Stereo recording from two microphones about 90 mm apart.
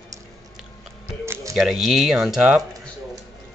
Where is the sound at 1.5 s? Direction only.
Centre (ahead or behind).